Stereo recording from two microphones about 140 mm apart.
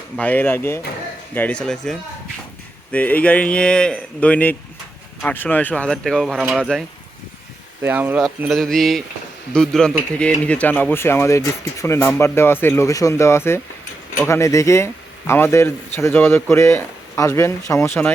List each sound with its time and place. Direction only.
0.2 s speech: 10° left (ahead or behind)
7.8 s speech: 15° right (ahead or behind)
8.2 s speech: centre (ahead or behind); by 18.1 s 15° left (ahead or behind)